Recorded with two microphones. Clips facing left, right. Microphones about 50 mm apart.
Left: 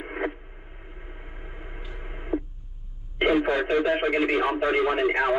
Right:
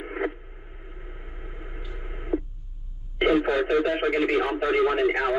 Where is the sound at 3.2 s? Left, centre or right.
Centre.